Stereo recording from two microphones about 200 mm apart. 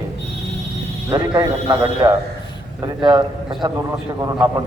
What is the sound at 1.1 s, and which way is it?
A man's voice, 20° right (ahead or behind).